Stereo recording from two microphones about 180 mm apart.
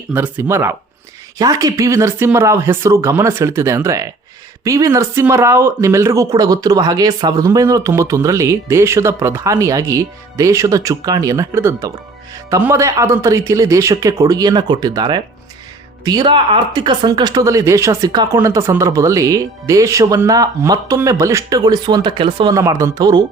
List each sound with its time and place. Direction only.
0.1 s speech: 10° right (ahead or behind)